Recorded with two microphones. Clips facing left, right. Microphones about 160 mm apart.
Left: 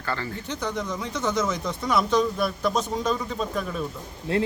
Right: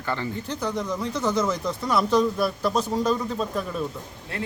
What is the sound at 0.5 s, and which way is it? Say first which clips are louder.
Speech: right 1 dB; 5° right (ahead or behind).